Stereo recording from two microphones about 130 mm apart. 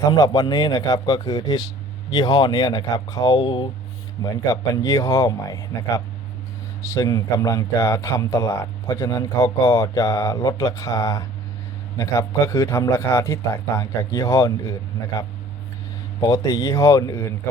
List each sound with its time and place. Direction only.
0.1 s speech: 30° left (ahead or behind)
4.2 s speech: 30° left (ahead or behind)
16.2 s speech: 25° left (ahead or behind)